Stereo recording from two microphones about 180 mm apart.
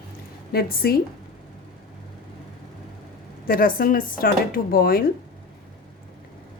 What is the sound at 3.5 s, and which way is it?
Speech, 50° left (ahead or behind).